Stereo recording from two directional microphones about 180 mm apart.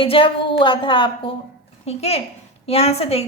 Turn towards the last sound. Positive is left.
turn(degrees=35)  # may be behind; listen again after turning